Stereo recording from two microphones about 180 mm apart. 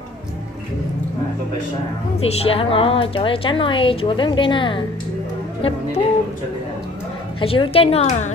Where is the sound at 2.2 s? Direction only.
30° left (ahead or behind).